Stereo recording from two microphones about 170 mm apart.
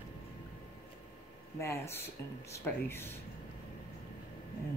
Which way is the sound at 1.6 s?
15° left (ahead or behind).